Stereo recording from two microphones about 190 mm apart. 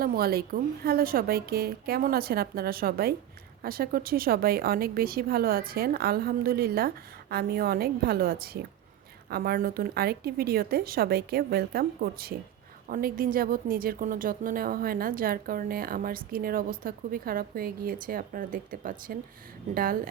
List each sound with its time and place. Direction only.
0.0 s a woman's voice: 50° right (ahead or behind)